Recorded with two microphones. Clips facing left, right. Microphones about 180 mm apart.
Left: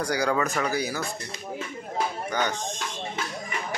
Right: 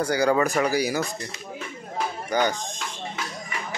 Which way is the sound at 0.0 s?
5° right (ahead or behind).